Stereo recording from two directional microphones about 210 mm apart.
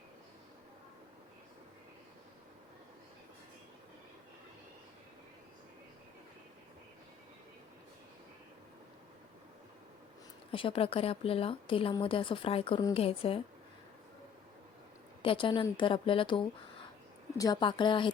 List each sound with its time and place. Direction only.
10.5 s speech: 25° left (ahead or behind)
15.2 s speech: 25° left (ahead or behind)